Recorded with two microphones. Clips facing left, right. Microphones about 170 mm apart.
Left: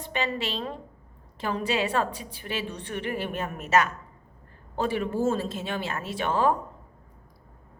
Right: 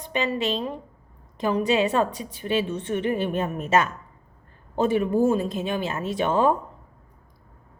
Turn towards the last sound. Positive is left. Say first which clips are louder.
# right 4 dB
turn(degrees=-20)  # may be behind; listen again after turning